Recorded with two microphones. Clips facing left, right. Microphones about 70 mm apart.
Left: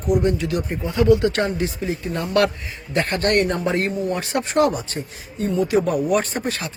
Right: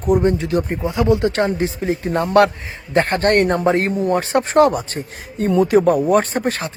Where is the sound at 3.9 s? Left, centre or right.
Right.